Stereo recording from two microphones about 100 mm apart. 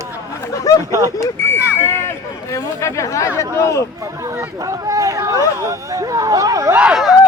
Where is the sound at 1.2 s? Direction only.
25° left (ahead or behind).